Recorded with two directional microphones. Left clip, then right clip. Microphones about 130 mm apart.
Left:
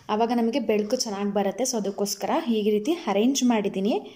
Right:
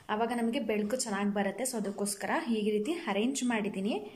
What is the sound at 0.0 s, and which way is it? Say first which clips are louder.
A woman's voice: left 8 dB; 25° left (ahead or behind).